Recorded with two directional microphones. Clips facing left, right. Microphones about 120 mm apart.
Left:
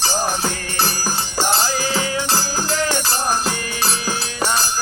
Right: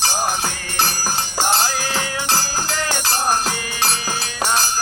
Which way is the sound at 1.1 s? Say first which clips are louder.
Right 1 dB; 20° right (ahead or behind).